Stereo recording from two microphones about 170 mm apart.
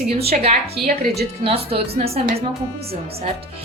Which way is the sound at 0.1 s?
35° right (ahead or behind).